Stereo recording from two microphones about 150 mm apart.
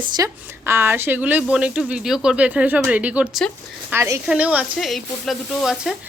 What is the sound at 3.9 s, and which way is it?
Speech, 20° right (ahead or behind).